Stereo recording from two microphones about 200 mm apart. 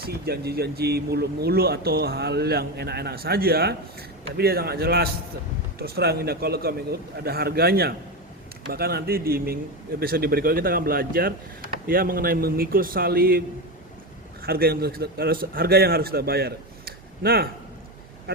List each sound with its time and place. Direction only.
0.0 s speech: 50° right (ahead or behind)
14.4 s speech: 50° right (ahead or behind)